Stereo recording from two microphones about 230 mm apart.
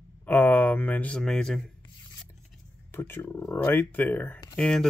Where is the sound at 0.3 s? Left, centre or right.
Centre.